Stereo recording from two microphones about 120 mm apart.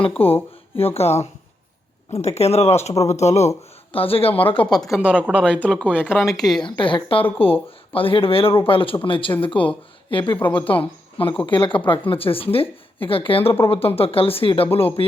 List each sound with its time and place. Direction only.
0.2 s speech: 50° left (ahead or behind); by 3.5 s 65° left (ahead or behind)
3.9 s speech: 50° left (ahead or behind)
4.8 s a woman's voice: 5° right (ahead or behind)
5.5 s speech: 10° left (ahead or behind)
6.1 s speech: centre (ahead or behind)
6.7 s a woman's voice: 45° left (ahead or behind)